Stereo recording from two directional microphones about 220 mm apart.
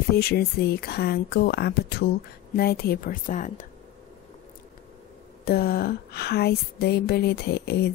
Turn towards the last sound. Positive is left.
turn(degrees=50)  # may be behind; listen again after turning